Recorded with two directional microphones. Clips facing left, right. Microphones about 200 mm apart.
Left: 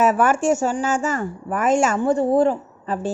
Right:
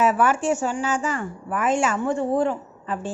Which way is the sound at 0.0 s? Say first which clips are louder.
Left 3 dB; 45° left (ahead or behind).